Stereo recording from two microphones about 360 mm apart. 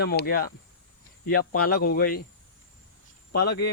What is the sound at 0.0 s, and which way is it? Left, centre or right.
Speech, left.